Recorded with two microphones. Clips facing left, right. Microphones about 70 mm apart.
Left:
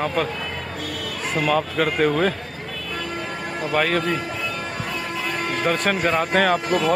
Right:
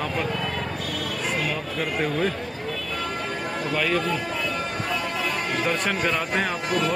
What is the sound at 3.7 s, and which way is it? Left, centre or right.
Speech, left.